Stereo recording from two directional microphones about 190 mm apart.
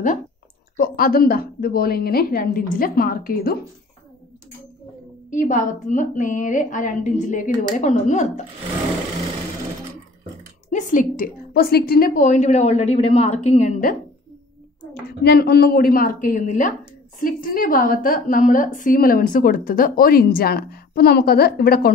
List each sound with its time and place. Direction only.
0.7 s a woman's voice: 50° left (ahead or behind)
5.3 s a woman's voice: 45° left (ahead or behind)
10.7 s a woman's voice: 40° left (ahead or behind)
15.0 s a woman's voice: 55° left (ahead or behind)